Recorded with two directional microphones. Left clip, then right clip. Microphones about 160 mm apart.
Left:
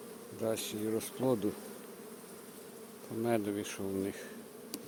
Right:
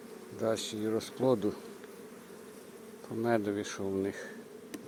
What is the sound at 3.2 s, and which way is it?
Speech, 5° right (ahead or behind).